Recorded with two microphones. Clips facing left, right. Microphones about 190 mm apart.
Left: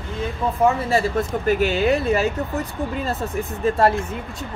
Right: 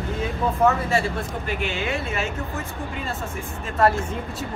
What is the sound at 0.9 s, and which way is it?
Speech, 40° left (ahead or behind).